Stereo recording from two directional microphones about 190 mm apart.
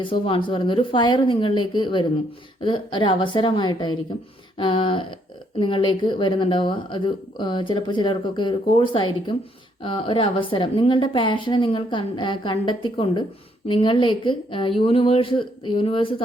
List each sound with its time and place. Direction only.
0.0 s speech: 25° left (ahead or behind)